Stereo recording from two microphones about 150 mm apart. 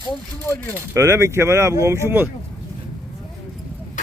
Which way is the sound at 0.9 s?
20° right (ahead or behind).